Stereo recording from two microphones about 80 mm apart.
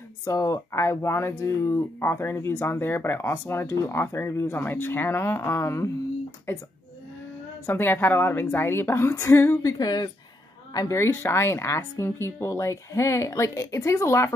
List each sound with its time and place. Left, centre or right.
0.2 s speech: left
7.6 s a woman's voice: left
9.6 s speech: left
10.9 s speech: left